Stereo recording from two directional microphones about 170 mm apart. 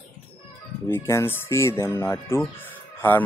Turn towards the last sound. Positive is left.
turn(degrees=10)  # may be behind; listen again after turning